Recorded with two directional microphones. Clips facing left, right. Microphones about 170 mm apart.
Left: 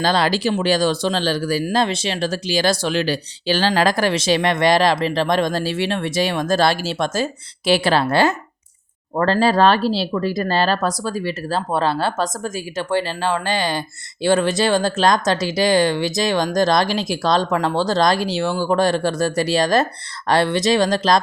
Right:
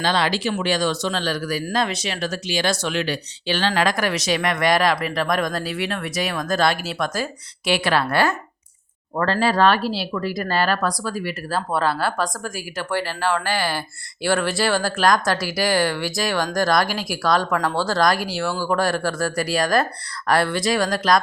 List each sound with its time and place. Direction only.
0.0 s speech: 35° left (ahead or behind)